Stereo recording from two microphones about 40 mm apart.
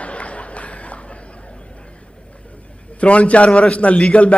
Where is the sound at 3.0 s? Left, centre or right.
Left.